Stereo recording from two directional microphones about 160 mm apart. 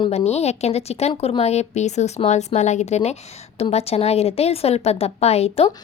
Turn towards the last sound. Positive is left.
turn(degrees=40)  # may be behind; listen again after turning